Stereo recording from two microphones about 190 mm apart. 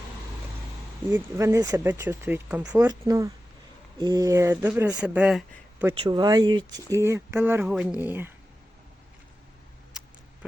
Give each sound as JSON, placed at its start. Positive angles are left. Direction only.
{"t": 1.1, "sound": "speech", "side_deg": -15}
{"t": 5.9, "sound": "speech", "side_deg": -25}
{"t": 10.0, "sound": "a sound", "side_deg": -5}